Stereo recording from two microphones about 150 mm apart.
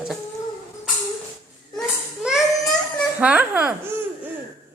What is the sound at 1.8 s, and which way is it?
Baby cry, 5° right (ahead or behind).